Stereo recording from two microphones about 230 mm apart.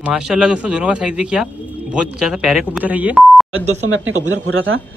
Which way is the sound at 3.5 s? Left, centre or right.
Right.